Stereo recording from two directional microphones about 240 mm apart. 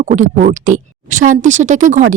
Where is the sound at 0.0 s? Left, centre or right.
Right.